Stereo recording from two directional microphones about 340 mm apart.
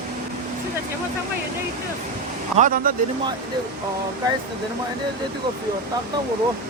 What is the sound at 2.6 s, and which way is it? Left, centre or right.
Speech, right.